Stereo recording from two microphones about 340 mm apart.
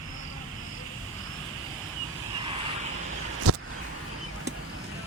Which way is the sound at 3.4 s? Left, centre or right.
Right.